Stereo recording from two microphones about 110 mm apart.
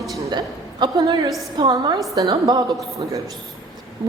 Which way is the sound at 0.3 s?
40° right (ahead or behind).